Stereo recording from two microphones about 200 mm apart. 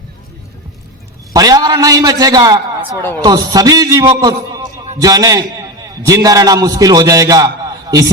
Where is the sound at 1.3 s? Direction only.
20° right (ahead or behind).